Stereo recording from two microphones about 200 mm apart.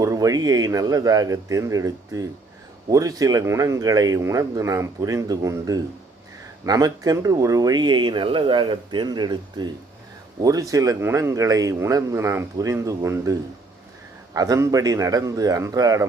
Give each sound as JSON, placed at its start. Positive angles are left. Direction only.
{"t": 0.0, "sound": "speech", "side_deg": -15}
{"t": 14.3, "sound": "speech", "side_deg": -15}